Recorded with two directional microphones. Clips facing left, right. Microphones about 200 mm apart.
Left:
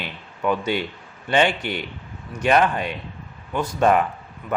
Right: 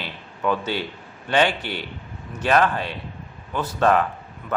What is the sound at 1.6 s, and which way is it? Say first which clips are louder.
Speech: left 3 dB; 40° right (ahead or behind).